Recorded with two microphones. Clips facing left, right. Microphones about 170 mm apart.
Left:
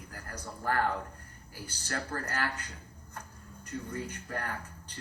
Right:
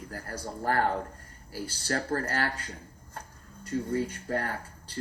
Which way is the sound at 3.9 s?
35° right (ahead or behind).